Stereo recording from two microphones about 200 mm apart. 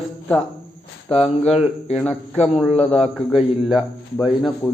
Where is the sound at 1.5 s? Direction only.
30° left (ahead or behind).